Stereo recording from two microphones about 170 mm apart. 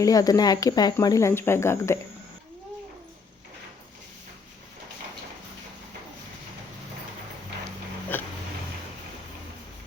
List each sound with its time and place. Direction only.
0.0 s speech: 20° left (ahead or behind)
8.1 s dog: 10° left (ahead or behind)